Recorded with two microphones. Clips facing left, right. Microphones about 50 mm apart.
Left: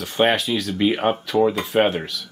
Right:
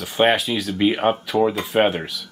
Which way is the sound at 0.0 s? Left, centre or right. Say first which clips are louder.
Right 1 dB; centre.